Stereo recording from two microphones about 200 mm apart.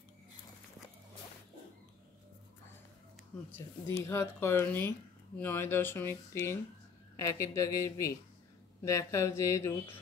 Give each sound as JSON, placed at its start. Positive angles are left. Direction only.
{"t": 3.3, "sound": "speech", "side_deg": 5}